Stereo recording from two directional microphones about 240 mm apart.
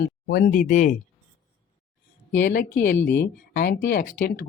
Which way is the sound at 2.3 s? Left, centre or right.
Left.